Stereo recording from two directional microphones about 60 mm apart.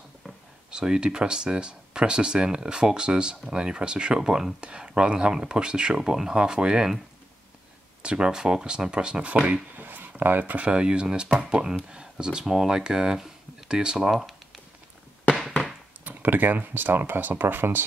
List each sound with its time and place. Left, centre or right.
0.7 s speech: centre
8.0 s speech: centre
16.0 s speech: right